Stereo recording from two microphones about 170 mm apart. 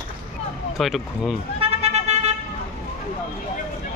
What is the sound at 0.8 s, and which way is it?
Speech, centre (ahead or behind).